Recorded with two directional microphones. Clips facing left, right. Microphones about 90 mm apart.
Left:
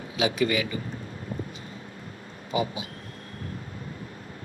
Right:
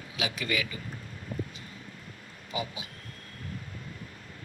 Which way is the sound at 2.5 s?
30° left (ahead or behind).